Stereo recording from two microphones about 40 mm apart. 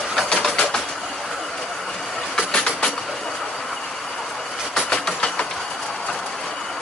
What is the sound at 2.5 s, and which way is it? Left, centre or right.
Train, centre.